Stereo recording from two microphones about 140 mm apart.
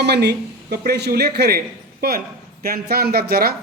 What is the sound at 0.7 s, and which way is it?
A man's voice, 90° right.